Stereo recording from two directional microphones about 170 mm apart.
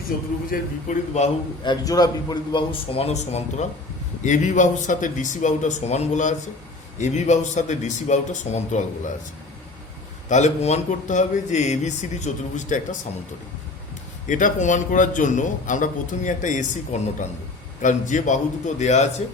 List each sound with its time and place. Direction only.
0.1 s a man's voice: 60° left (ahead or behind)
0.5 s a man's voice: 45° left (ahead or behind)
1.6 s a man's voice: 20° left (ahead or behind); by 8.8 s 45° left (ahead or behind)
10.2 s a man's voice: 45° left (ahead or behind)
14.3 s a man's voice: 50° left (ahead or behind)